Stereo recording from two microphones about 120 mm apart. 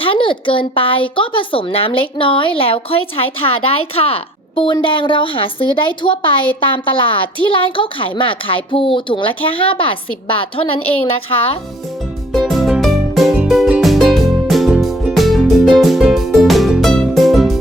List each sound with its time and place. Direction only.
0.0 s a woman's voice: 45° left (ahead or behind)
12.3 s music: centre (ahead or behind)